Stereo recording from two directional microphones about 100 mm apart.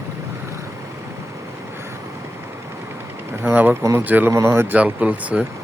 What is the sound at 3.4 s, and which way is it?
Speech, 20° right (ahead or behind).